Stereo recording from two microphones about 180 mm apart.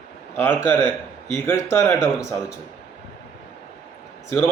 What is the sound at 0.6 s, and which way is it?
A man's voice, 15° left (ahead or behind).